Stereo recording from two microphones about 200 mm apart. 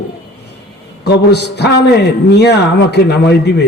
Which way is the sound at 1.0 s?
55° left (ahead or behind).